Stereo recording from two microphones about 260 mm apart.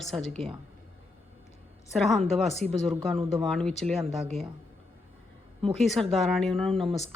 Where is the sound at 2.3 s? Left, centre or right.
Centre.